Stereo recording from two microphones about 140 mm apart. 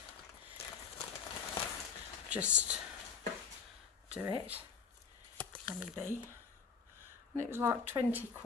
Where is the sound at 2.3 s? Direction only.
10° right (ahead or behind).